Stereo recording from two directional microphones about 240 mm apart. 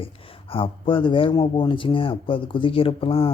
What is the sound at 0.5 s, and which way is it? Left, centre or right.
Speech, left.